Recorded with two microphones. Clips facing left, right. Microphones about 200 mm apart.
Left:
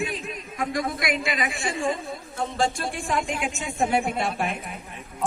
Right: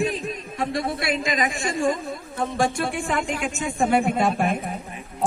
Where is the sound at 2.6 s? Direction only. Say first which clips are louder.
Right 3 dB; 55° right (ahead or behind).